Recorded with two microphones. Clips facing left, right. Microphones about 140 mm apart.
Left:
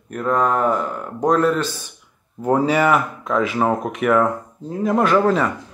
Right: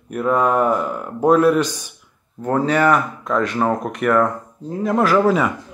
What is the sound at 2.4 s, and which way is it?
Speech, 10° left (ahead or behind).